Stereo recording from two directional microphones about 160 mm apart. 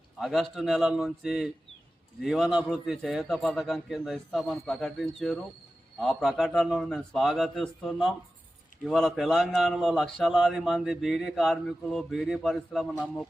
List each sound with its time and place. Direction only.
0.2 s a man's voice: centre (ahead or behind)